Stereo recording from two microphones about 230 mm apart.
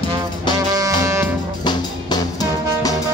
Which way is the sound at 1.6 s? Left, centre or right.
Centre.